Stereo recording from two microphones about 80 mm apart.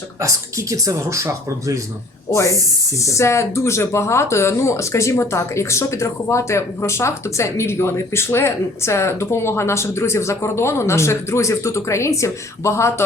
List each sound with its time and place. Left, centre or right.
0.2 s speech: right
2.3 s speech: left